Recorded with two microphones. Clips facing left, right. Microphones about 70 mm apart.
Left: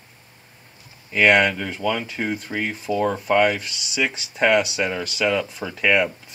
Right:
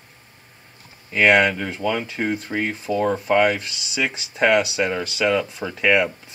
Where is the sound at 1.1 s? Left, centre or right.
Centre.